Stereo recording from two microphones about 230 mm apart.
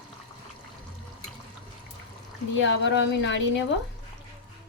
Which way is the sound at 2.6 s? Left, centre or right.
Left.